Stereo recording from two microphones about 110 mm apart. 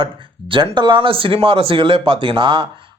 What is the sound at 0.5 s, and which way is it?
Speech, 45° right (ahead or behind).